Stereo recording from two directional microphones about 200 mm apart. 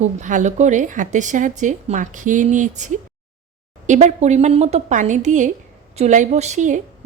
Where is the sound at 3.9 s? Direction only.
35° right (ahead or behind).